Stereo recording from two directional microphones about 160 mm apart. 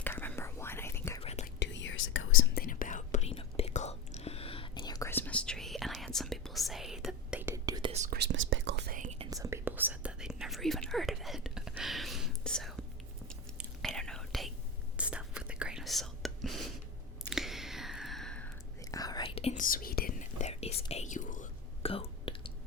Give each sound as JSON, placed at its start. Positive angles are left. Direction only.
{"t": 0.0, "sound": "whispering", "side_deg": 10}
{"t": 1.2, "sound": "whispering", "side_deg": 40}
{"t": 1.5, "sound": "whispering", "side_deg": 90}
{"t": 2.6, "sound": "whispering", "side_deg": 60}
{"t": 7.9, "sound": "whispering", "side_deg": -45}
{"t": 8.7, "sound": "whispering", "side_deg": -90}
{"t": 9.3, "sound": "whispering", "side_deg": -20}
{"t": 13.8, "sound": "whispering", "side_deg": 5}
{"t": 17.2, "sound": "a sound", "side_deg": 0}
{"t": 18.9, "sound": "whispering", "side_deg": 20}
{"t": 19.3, "sound": "whispering", "side_deg": 40}
{"t": 19.5, "sound": "whispering", "side_deg": 60}
{"t": 21.8, "sound": "whispering", "side_deg": 35}